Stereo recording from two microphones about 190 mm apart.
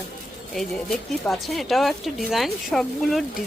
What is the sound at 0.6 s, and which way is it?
Speech, centre (ahead or behind).